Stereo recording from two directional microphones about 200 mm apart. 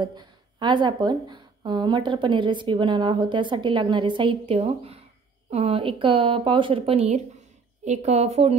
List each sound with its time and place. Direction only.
0.0 s a woman's voice: 20° right (ahead or behind)